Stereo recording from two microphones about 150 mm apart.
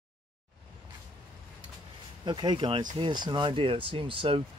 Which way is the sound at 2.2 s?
30° right (ahead or behind).